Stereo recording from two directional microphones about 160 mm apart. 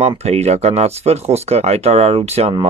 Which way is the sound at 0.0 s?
40° right (ahead or behind).